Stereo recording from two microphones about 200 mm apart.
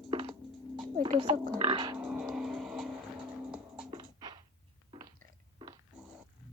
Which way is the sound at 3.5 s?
5° right (ahead or behind).